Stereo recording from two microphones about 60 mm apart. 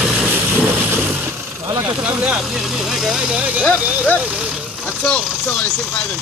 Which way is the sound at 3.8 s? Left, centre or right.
Right.